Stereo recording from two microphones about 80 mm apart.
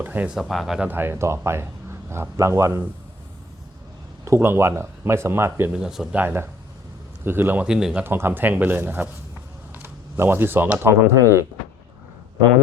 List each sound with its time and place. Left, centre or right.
0.0 s speech: right
0.3 s speech: centre
0.9 s speech: right
4.3 s speech: right
5.7 s speech: centre
6.1 s speech: right
7.7 s speech: centre
8.0 s speech: right